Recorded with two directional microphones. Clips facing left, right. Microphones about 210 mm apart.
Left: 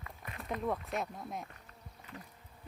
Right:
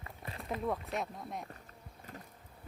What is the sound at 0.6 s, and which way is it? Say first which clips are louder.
Speech: even; centre (ahead or behind).